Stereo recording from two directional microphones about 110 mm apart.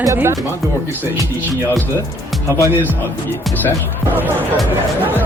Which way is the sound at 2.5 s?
30° left (ahead or behind).